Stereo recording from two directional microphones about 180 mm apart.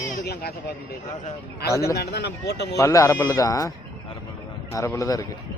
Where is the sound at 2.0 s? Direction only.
65° left (ahead or behind).